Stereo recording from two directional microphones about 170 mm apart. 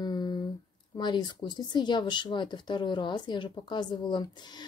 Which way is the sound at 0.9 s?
25° left (ahead or behind).